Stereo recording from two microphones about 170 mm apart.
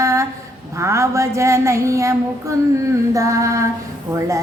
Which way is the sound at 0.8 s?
15° right (ahead or behind).